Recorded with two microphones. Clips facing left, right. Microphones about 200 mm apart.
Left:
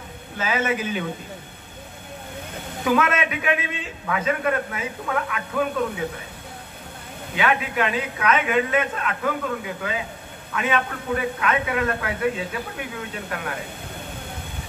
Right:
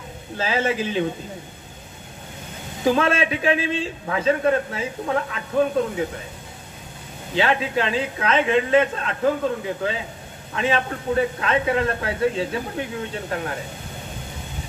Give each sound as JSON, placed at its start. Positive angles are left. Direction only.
{"t": 0.4, "sound": "speech", "side_deg": -30}
{"t": 2.8, "sound": "a man's voice", "side_deg": -30}
{"t": 7.3, "sound": "speech", "side_deg": -30}